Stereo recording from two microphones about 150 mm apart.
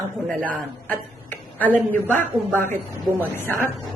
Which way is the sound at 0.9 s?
10° left (ahead or behind).